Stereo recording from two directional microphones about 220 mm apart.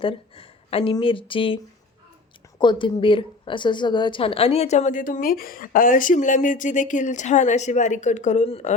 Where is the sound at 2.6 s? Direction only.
20° left (ahead or behind).